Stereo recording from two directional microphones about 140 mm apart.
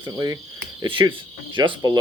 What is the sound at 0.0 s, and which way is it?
Speech, 25° right (ahead or behind).